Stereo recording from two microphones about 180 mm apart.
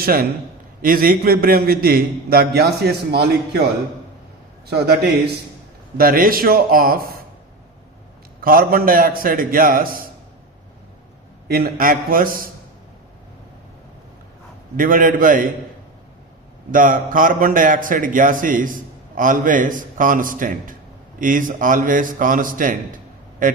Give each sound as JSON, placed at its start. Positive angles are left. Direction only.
{"t": 0.0, "sound": "a man's voice", "side_deg": -55}
{"t": 4.7, "sound": "a man's voice", "side_deg": -60}
{"t": 8.4, "sound": "a man's voice", "side_deg": -55}
{"t": 11.4, "sound": "a man's voice", "side_deg": -55}
{"t": 14.8, "sound": "a man's voice", "side_deg": -50}
{"t": 16.7, "sound": "a man's voice", "side_deg": -50}